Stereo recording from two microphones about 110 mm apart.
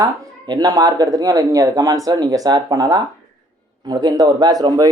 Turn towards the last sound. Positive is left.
turn(degrees=-35)  # may be behind; listen again after turning